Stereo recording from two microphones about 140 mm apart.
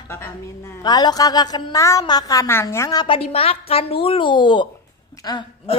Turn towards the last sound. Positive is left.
turn(degrees=35)  # may be behind; listen again after turning